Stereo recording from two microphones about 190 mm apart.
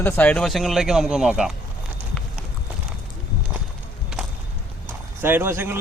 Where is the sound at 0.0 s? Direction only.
5° left (ahead or behind).